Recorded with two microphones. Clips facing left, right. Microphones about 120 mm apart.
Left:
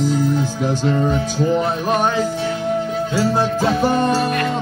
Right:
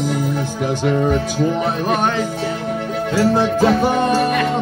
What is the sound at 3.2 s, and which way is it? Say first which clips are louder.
Music: right 4 dB; centre (ahead or behind).